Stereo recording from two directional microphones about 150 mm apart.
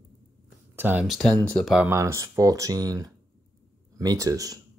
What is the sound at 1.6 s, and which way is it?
Speech, 5° right (ahead or behind).